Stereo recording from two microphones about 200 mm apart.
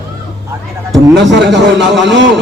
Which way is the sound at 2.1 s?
60° right (ahead or behind).